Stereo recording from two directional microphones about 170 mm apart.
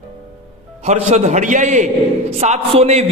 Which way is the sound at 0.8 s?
40° right (ahead or behind).